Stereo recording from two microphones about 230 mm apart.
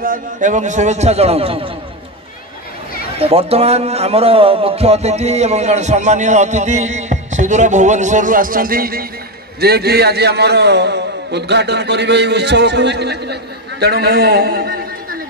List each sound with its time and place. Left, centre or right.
0.0 s a man's voice: right
3.2 s a man's voice: right